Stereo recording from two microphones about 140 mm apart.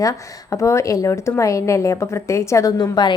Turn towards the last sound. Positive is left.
turn(degrees=30)  # may be behind; listen again after turning